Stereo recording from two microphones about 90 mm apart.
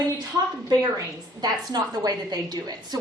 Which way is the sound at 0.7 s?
45° right (ahead or behind).